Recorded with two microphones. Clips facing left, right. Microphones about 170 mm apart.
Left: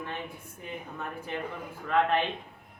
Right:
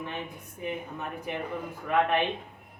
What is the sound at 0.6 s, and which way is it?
A man's voice, 15° right (ahead or behind).